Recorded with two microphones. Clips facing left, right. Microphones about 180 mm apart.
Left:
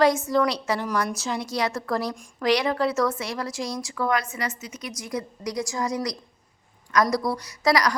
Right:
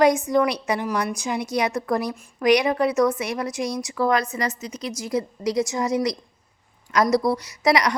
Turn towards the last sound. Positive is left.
turn(degrees=-20)  # may be behind; listen again after turning